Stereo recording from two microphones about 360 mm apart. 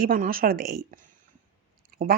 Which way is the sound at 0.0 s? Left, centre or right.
Right.